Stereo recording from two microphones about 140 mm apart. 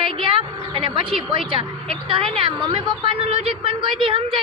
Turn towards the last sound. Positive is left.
turn(degrees=-40)  # may be behind; listen again after turning